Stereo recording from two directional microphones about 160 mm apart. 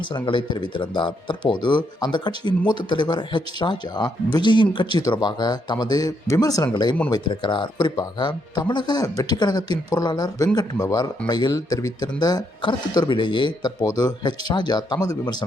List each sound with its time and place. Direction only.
0.1 s speech: 30° left (ahead or behind)